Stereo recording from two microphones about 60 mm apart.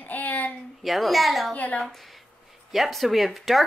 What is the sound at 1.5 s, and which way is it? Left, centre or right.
Speech, left.